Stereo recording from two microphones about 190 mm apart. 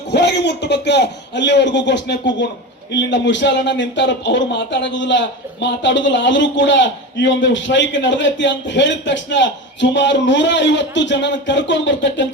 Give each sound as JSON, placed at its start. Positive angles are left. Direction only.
{"t": 0.1, "sound": "a man's voice", "side_deg": 60}